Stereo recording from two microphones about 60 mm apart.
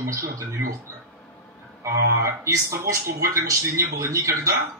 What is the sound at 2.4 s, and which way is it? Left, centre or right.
A man's voice, right.